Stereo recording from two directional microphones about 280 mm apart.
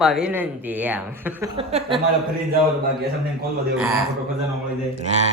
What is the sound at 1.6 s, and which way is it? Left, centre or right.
Speech, right.